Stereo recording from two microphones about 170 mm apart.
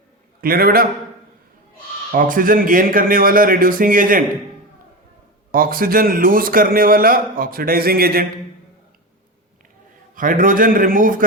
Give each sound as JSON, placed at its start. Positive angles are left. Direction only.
{"t": 0.4, "sound": "a man's voice", "side_deg": -60}
{"t": 2.1, "sound": "a man's voice", "side_deg": -55}
{"t": 5.5, "sound": "a man's voice", "side_deg": -55}
{"t": 10.2, "sound": "a man's voice", "side_deg": -55}